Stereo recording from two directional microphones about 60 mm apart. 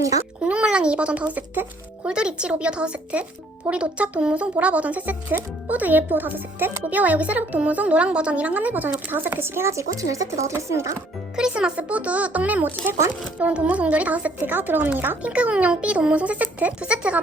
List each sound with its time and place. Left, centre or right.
0.4 s a child's voice: centre; by 9.8 s right
10.0 s speech: right
11.3 s speech: centre; by 15.2 s right
15.2 s speech: right